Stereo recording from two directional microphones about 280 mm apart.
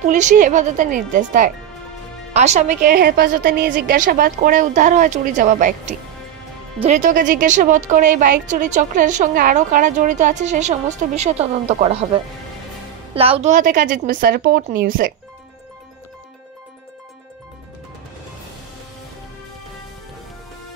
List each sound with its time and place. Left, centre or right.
0.1 s a woman's voice: right